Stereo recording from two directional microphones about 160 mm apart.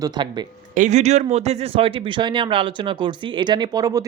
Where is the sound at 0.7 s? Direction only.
50° right (ahead or behind).